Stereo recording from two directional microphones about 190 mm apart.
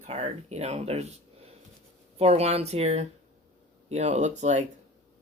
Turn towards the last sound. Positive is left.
turn(degrees=-40)  # may be behind; listen again after turning